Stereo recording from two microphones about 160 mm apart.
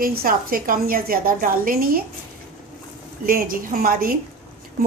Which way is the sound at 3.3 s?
60° right (ahead or behind).